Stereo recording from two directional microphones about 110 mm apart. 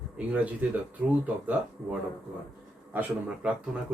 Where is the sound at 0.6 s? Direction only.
15° right (ahead or behind).